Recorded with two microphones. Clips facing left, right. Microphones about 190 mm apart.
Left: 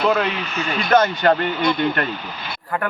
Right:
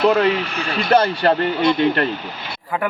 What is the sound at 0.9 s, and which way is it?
Speech, 35° right (ahead or behind).